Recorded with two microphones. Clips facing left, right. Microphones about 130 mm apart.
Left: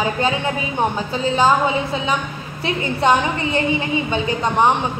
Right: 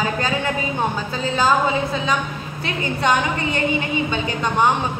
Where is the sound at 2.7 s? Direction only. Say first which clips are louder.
Left 3 dB; 25° left (ahead or behind).